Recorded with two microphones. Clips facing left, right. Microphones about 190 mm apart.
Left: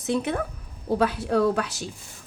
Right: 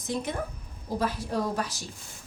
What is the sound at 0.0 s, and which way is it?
A woman's voice, 70° left (ahead or behind).